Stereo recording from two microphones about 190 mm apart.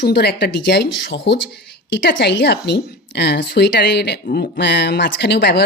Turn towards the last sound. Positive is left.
turn(degrees=60)  # may be behind; listen again after turning